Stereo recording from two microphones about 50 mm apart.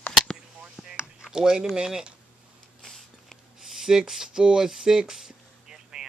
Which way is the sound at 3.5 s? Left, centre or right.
Centre.